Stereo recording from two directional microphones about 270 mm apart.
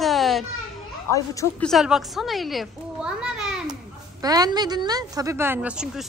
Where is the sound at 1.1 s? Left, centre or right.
Centre.